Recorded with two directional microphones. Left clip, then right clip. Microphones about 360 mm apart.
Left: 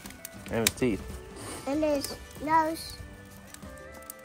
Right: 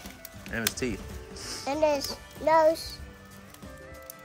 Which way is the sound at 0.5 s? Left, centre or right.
Centre.